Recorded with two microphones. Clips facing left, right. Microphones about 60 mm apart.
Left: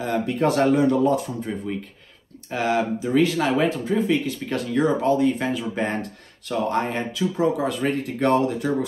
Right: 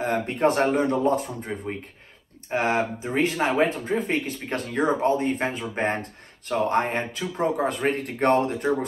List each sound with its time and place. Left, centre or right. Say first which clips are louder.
0.0 s speech: even; right